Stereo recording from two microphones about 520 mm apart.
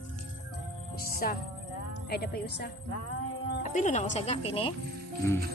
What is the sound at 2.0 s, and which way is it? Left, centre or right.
A woman's voice, centre.